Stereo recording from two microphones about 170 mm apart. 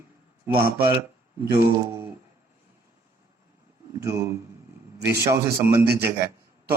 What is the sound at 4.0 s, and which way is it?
Speech, 15° right (ahead or behind).